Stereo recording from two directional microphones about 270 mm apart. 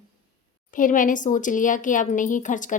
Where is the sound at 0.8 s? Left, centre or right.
Left.